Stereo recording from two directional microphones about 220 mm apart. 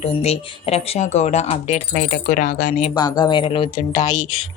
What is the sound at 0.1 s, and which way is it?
Speech, 25° left (ahead or behind).